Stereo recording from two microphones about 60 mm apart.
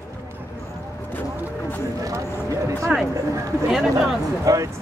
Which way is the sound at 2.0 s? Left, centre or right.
Right.